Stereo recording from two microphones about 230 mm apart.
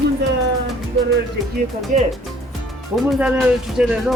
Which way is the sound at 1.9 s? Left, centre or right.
Right.